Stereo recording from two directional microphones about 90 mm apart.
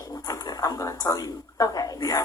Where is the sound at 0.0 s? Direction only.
40° left (ahead or behind).